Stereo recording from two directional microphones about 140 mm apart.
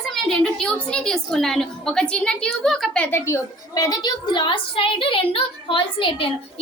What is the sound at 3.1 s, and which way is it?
A woman's voice, 20° left (ahead or behind).